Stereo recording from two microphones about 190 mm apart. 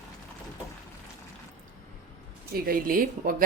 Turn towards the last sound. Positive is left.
turn(degrees=-50)  # may be behind; listen again after turning